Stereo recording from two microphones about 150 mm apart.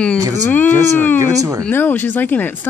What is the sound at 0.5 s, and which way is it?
Speech, 10° left (ahead or behind).